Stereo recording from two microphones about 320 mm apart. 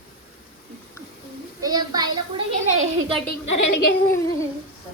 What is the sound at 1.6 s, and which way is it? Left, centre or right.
Speech, centre.